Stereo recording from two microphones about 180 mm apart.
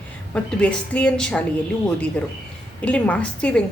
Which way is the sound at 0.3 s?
5° left (ahead or behind).